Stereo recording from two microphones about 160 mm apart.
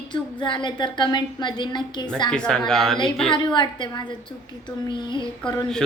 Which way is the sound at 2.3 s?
5° left (ahead or behind).